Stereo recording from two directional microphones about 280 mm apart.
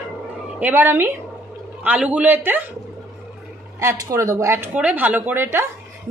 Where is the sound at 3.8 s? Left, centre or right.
Centre.